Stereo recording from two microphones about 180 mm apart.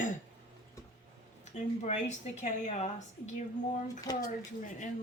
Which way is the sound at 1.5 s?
40° left (ahead or behind).